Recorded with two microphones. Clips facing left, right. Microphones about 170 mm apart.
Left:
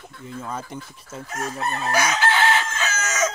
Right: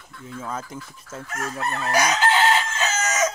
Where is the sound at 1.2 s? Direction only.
20° left (ahead or behind).